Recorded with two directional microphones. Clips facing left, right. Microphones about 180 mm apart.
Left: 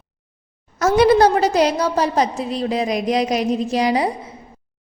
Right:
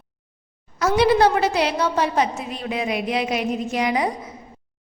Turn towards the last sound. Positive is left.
turn(degrees=30)  # may be behind; listen again after turning